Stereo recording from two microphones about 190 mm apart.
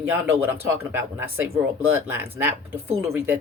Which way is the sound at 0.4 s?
10° right (ahead or behind).